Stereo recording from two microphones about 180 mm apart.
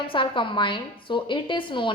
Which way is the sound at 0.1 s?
30° left (ahead or behind).